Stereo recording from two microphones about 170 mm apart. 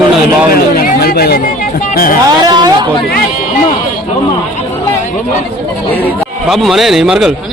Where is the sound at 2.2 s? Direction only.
25° right (ahead or behind).